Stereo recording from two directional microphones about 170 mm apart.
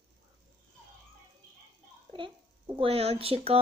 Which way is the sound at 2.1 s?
30° right (ahead or behind).